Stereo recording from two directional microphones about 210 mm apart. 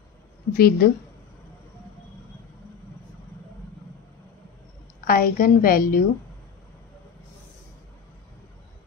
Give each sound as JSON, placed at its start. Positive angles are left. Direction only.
{"t": 0.6, "sound": "a woman's voice", "side_deg": 45}
{"t": 5.0, "sound": "a woman's voice", "side_deg": 45}